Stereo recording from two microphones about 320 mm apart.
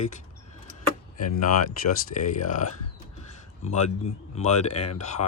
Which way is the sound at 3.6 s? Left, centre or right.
Left.